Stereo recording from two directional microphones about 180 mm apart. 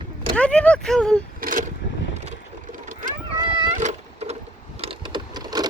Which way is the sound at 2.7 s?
50° right (ahead or behind).